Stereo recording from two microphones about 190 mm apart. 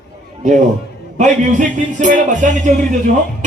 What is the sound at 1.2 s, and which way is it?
Music, 40° right (ahead or behind).